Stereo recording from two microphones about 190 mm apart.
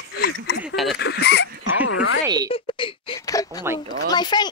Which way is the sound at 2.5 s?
25° left (ahead or behind).